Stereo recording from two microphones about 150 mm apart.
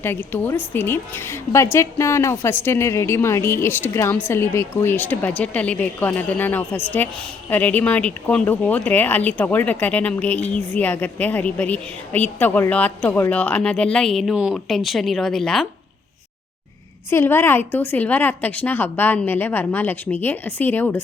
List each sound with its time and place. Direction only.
0.0 s a woman's voice: 15° left (ahead or behind)
17.1 s a woman's voice: 15° left (ahead or behind)